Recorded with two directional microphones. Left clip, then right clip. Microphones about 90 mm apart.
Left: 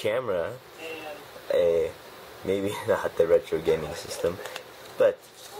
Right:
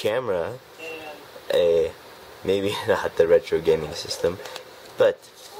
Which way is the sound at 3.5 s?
50° right (ahead or behind).